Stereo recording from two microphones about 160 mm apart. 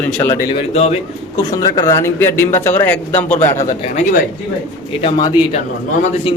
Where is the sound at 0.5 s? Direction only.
40° left (ahead or behind).